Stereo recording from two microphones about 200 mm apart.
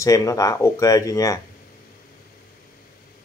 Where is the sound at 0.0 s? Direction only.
15° left (ahead or behind).